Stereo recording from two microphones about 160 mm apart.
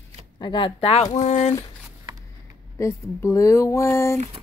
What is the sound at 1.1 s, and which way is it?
Speech, 45° left (ahead or behind).